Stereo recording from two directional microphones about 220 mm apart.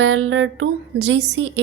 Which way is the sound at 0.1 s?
60° right (ahead or behind).